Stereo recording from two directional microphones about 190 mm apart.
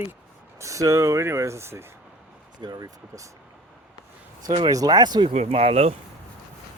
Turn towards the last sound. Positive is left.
turn(degrees=-35)  # may be behind; listen again after turning